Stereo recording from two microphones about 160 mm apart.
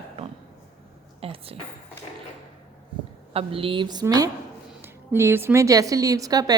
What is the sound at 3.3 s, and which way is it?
A woman's voice, 35° right (ahead or behind).